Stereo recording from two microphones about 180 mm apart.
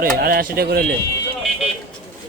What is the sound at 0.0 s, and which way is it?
Speech, 55° right (ahead or behind).